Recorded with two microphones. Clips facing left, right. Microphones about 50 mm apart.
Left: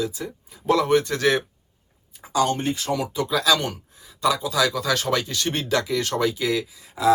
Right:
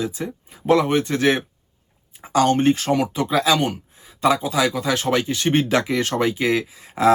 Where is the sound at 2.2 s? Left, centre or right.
Right.